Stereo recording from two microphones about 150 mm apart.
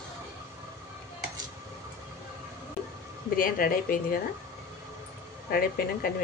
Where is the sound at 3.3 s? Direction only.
70° left (ahead or behind).